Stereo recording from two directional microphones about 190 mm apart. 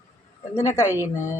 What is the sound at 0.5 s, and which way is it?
Speech, 15° left (ahead or behind).